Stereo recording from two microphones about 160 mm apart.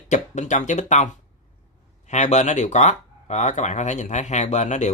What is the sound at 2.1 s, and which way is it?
Speech, 45° left (ahead or behind).